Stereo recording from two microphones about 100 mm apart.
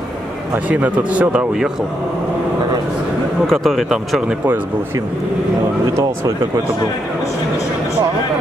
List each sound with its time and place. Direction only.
0.7 s a man's voice: 15° right (ahead or behind)
3.4 s speech: centre (ahead or behind)